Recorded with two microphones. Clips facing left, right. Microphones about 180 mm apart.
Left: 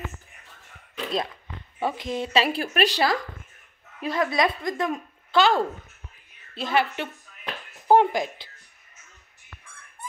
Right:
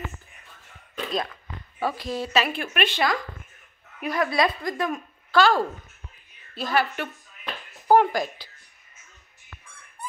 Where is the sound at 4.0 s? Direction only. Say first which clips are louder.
Even; 25° left (ahead or behind).